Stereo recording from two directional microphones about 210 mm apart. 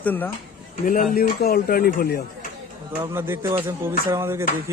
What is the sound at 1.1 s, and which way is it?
Speech, 45° left (ahead or behind).